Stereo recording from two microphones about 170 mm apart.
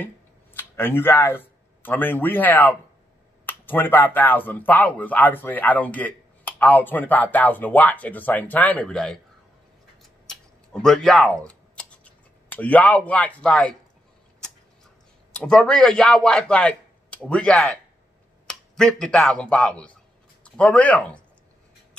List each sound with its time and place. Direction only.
0.6 s speech: 10° left (ahead or behind)
10.2 s typing: 5° left (ahead or behind)
15.3 s a man's voice: 5° left (ahead or behind)